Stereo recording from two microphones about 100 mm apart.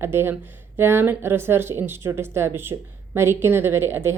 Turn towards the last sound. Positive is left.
turn(degrees=-25)  # may be behind; listen again after turning